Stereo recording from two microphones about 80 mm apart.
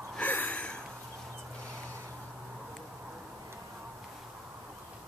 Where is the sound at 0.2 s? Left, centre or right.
Left.